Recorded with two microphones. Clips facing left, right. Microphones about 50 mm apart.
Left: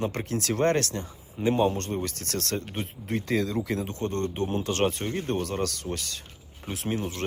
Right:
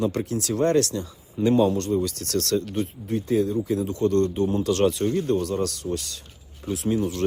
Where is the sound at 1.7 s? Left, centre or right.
Left.